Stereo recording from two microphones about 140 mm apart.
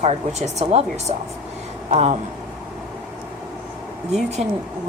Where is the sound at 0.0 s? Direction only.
50° right (ahead or behind).